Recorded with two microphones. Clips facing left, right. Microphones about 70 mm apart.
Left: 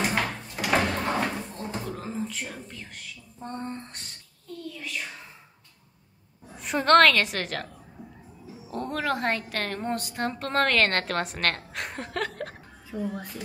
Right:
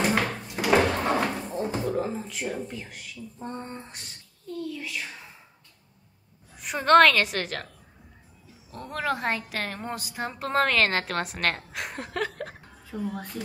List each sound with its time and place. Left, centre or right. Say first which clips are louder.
0.6 s cupboard open or close: right 3 dB; centre
0.8 s slam: right 2 dB; centre
1.8 s a woman's voice: right 1 dB; centre
6.5 s a woman's voice: right 1 dB; centre
8.7 s a woman's voice: left 1 dB; centre